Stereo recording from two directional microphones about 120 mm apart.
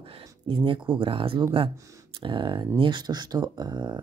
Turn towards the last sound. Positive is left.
turn(degrees=-35)  # may be behind; listen again after turning